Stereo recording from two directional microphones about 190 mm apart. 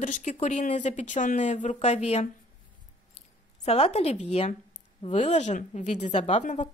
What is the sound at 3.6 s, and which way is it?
Speech, 30° left (ahead or behind).